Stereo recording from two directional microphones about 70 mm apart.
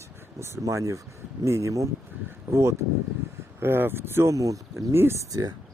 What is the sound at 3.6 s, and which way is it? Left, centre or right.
Speech, right.